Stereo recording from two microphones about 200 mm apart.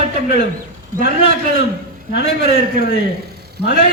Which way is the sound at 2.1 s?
55° left (ahead or behind).